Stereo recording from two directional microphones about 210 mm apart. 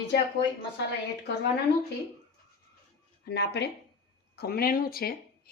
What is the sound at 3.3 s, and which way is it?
Speech, 50° left (ahead or behind).